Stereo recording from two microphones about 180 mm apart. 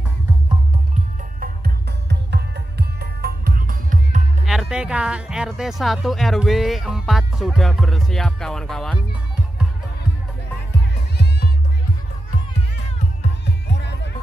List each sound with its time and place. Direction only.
1.4 s music: 65° right (ahead or behind); by 4.2 s 45° right (ahead or behind)
4.5 s speech: 5° right (ahead or behind)
11.1 s music: 60° left (ahead or behind)